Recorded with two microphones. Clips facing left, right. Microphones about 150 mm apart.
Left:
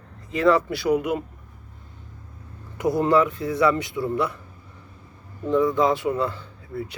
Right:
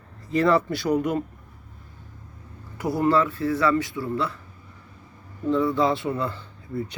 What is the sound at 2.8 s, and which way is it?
Speech, 20° left (ahead or behind).